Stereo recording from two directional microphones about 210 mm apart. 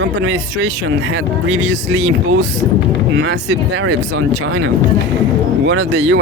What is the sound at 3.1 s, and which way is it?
Speech, 55° right (ahead or behind).